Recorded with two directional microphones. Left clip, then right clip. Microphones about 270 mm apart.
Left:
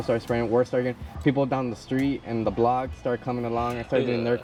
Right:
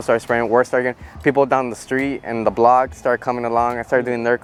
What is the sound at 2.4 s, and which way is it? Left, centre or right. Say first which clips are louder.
Speech: right 10 dB; centre.